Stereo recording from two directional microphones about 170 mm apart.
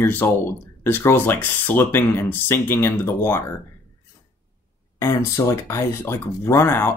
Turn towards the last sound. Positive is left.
turn(degrees=15)  # may be behind; listen again after turning